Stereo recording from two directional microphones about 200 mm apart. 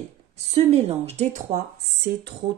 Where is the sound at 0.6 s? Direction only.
30° right (ahead or behind).